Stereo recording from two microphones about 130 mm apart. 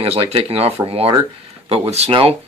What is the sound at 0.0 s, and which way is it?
Speech, 50° right (ahead or behind).